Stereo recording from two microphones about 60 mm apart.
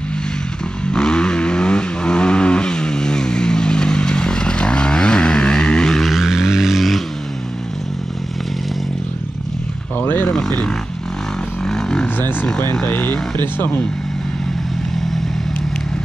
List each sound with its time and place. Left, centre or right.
0.8 s vehicle: centre
6.1 s vehicle: centre
9.9 s vehicle: left
11.6 s vehicle: centre
12.2 s vehicle: left
12.8 s speech: left